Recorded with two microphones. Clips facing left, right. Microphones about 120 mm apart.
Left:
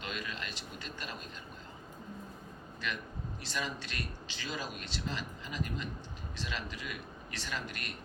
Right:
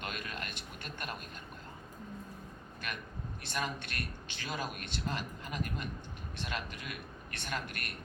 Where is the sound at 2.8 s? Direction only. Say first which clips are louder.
Left 3 dB; 55° right (ahead or behind).